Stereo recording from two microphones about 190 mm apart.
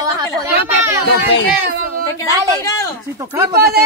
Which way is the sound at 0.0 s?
20° right (ahead or behind).